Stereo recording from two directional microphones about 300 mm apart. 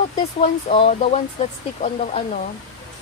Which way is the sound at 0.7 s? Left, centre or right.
Centre.